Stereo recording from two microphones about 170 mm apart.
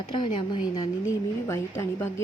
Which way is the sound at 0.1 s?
30° left (ahead or behind).